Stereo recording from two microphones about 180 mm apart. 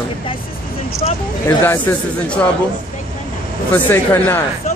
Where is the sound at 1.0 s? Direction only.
35° left (ahead or behind).